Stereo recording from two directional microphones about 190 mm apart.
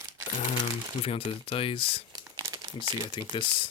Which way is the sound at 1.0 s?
30° left (ahead or behind).